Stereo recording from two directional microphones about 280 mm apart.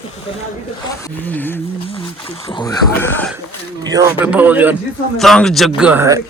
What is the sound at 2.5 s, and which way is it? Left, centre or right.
Speech, centre.